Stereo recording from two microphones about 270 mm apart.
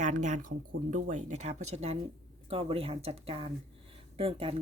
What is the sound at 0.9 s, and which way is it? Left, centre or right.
Speech, right.